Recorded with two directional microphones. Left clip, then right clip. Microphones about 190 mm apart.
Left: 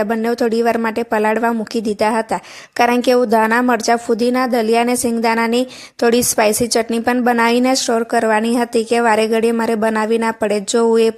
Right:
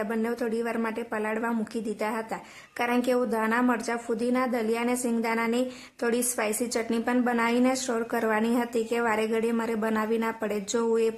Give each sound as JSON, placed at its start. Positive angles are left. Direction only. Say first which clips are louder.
{"t": 0.0, "sound": "a woman's voice", "louder": "left 12 dB", "side_deg": 35}